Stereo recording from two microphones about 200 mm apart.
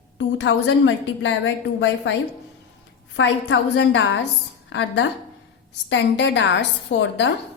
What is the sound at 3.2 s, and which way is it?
A woman's voice, 65° left (ahead or behind).